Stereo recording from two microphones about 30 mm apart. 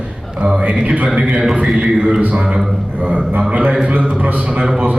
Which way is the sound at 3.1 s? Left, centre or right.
Right.